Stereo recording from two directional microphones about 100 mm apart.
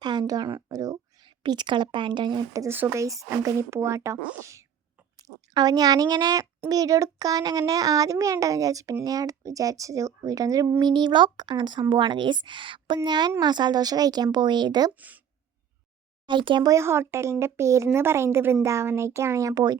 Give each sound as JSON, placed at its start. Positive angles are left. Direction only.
{"t": 0.0, "sound": "a child's voice", "side_deg": -45}
{"t": 1.2, "sound": "speech", "side_deg": -50}
{"t": 2.7, "sound": "speech", "side_deg": -20}
{"t": 3.0, "sound": "a child's voice", "side_deg": -35}
{"t": 5.5, "sound": "a child's voice", "side_deg": -40}
{"t": 13.1, "sound": "speech", "side_deg": -45}
{"t": 14.9, "sound": "a woman's voice", "side_deg": -15}
{"t": 16.2, "sound": "speech", "side_deg": -55}
{"t": 16.6, "sound": "speech", "side_deg": -30}